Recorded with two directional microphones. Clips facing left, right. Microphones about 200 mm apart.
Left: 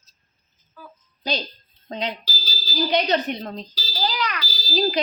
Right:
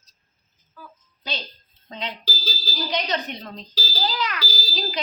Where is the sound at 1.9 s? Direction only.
40° left (ahead or behind).